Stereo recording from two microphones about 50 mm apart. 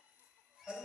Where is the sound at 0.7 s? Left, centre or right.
Centre.